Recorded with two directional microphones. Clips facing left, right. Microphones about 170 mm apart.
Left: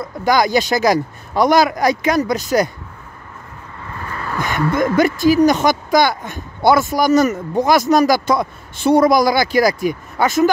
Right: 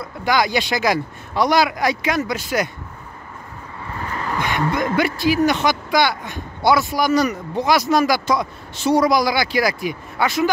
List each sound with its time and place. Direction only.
0.0 s speech: 45° left (ahead or behind)
4.4 s speech: 45° left (ahead or behind)